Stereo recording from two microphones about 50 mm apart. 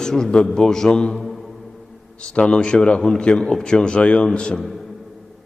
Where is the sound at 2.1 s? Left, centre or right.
Left.